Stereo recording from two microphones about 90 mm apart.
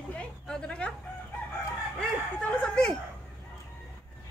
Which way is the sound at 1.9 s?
10° left (ahead or behind).